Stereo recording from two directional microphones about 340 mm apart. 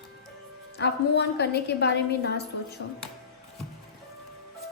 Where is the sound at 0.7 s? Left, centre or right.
Left.